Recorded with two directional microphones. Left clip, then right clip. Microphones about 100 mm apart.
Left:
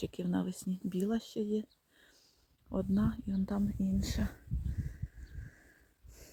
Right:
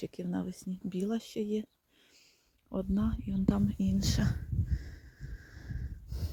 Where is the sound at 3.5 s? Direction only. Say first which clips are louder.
Right 7 dB; 35° right (ahead or behind).